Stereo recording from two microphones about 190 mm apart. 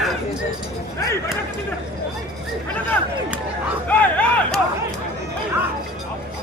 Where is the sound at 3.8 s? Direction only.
5° left (ahead or behind).